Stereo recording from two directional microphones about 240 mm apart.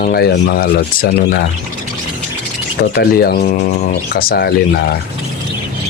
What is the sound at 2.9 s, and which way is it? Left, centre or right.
Speech, left.